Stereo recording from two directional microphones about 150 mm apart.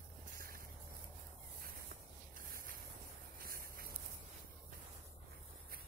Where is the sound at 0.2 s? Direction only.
65° right (ahead or behind).